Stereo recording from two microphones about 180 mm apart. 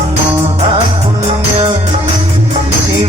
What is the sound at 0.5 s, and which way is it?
Music, 35° right (ahead or behind).